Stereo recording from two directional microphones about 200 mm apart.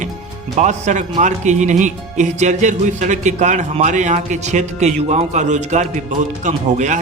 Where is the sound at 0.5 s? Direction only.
35° right (ahead or behind).